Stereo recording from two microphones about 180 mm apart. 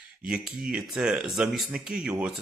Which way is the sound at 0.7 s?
5° right (ahead or behind).